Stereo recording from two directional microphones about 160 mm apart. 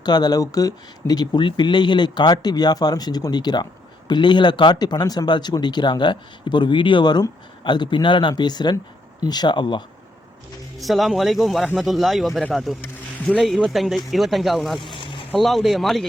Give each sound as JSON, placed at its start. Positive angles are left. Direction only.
{"t": 0.0, "sound": "speech", "side_deg": 25}
{"t": 10.8, "sound": "speech", "side_deg": 0}
{"t": 14.9, "sound": "boat", "side_deg": 30}
{"t": 15.3, "sound": "speech", "side_deg": 0}